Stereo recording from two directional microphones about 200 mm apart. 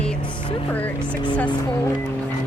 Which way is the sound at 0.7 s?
10° left (ahead or behind).